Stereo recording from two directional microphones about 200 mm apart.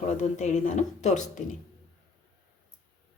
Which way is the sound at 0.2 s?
35° left (ahead or behind).